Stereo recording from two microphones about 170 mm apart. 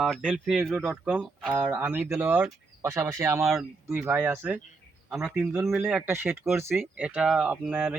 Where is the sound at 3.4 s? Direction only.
Centre (ahead or behind).